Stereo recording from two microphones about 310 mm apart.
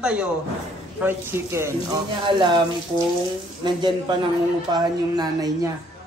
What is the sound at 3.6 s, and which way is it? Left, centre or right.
A man's voice, centre.